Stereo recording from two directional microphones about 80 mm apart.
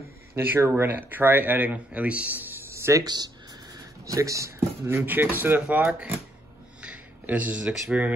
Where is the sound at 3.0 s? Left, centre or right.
Right.